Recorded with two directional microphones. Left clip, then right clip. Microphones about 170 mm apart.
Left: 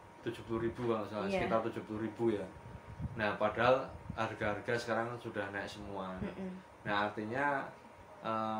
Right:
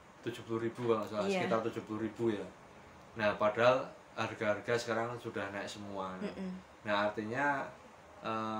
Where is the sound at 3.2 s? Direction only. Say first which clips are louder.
Right 3 dB; 25° right (ahead or behind).